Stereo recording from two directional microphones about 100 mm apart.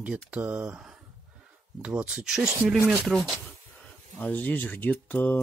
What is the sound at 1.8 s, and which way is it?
Speech, 10° right (ahead or behind).